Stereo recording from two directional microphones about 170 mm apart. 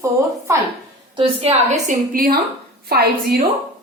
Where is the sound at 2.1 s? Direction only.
60° right (ahead or behind).